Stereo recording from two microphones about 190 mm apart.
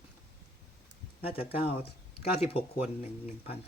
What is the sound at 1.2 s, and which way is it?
Speech, 30° left (ahead or behind).